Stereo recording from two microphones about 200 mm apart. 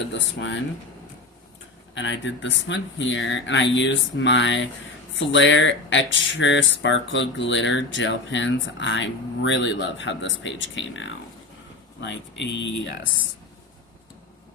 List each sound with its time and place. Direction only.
0.1 s speech: 65° left (ahead or behind)
2.0 s speech: 65° left (ahead or behind)